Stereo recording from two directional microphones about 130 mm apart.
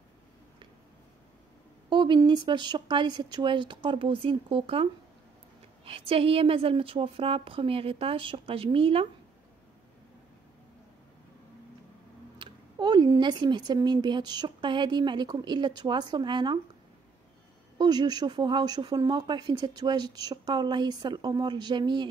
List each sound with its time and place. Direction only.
1.9 s speech: 35° right (ahead or behind)
5.9 s a woman's voice: 45° right (ahead or behind)
12.4 s a sound: 35° right (ahead or behind)
13.2 s speech: 35° right (ahead or behind)
17.7 s speech: 30° right (ahead or behind)